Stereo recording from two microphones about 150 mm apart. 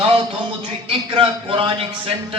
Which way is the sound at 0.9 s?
35° right (ahead or behind).